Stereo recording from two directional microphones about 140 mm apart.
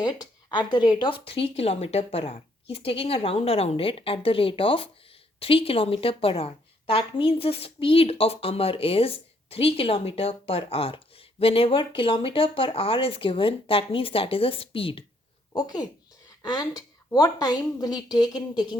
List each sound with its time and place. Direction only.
0.0 s a woman's voice: 30° left (ahead or behind)
15.5 s a woman's voice: 30° left (ahead or behind)